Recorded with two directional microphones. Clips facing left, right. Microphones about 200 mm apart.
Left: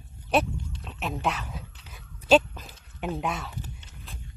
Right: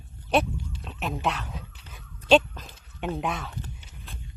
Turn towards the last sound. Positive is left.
turn(degrees=0)  # may be behind; listen again after turning